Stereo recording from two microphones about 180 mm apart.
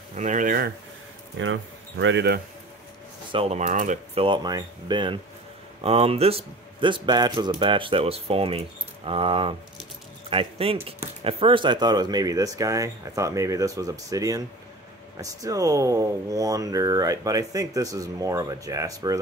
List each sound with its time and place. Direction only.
0.1 s speech: 40° right (ahead or behind)
1.4 s speech: 90° right; by 2.4 s 70° right (ahead or behind)
3.3 s speech: 35° right (ahead or behind)
4.2 s speech: 25° right (ahead or behind)